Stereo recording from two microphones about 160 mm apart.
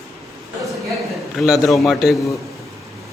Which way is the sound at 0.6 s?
Centre (ahead or behind).